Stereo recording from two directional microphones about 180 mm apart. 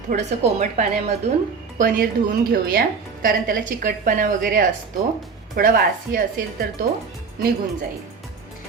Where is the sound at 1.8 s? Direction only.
50° right (ahead or behind).